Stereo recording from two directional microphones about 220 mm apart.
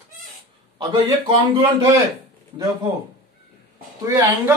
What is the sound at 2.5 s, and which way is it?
Speech, 15° right (ahead or behind).